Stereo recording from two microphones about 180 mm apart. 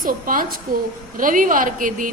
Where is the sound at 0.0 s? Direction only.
50° right (ahead or behind).